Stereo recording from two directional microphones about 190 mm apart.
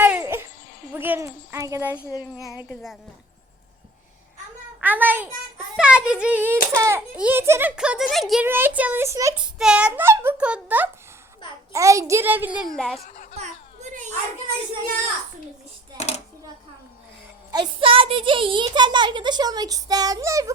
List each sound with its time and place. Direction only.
0.0 s a sound: 10° right (ahead or behind)
2.6 s a child's voice: 5° right (ahead or behind)
4.8 s a child's voice: 10° right (ahead or behind)
9.4 s a child's voice: 5° right (ahead or behind)
13.3 s children playing: 35° right (ahead or behind)
16.0 s a sound: 35° left (ahead or behind)
17.5 s a child's voice: 25° right (ahead or behind)